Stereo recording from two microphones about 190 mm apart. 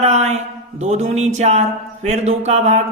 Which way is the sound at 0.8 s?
35° right (ahead or behind).